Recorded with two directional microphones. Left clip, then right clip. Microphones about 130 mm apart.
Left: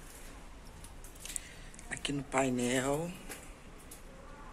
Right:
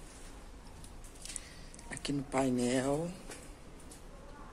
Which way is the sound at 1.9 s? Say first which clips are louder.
Left 2 dB; 25° right (ahead or behind).